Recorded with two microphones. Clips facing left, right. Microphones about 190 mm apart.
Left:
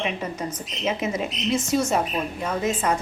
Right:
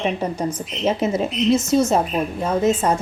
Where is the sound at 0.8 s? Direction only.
35° right (ahead or behind).